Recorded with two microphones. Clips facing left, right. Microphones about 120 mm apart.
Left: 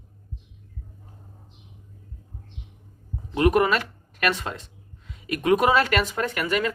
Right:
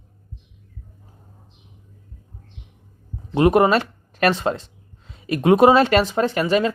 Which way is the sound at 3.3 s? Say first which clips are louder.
Right 5 dB; 30° right (ahead or behind).